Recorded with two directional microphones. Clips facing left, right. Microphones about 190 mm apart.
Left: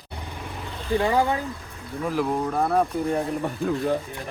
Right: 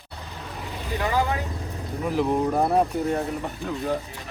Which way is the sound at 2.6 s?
15° right (ahead or behind).